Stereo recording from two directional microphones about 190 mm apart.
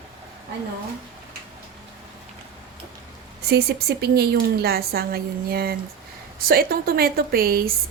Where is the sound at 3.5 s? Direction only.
55° right (ahead or behind).